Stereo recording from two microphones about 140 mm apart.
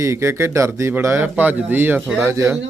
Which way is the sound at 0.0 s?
20° right (ahead or behind).